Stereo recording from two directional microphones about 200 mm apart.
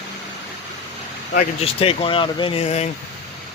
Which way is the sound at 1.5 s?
30° left (ahead or behind).